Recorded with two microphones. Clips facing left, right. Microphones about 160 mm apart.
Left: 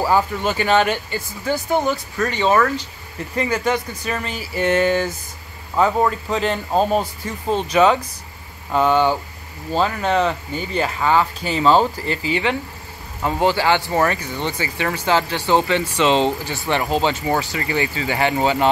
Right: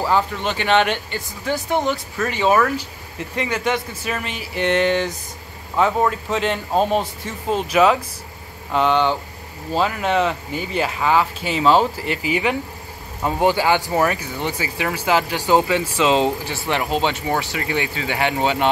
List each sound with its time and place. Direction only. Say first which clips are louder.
0.0 s speech: left 2 dB; 5° left (ahead or behind)
9.7 s speech: left 1 dB; 5° right (ahead or behind)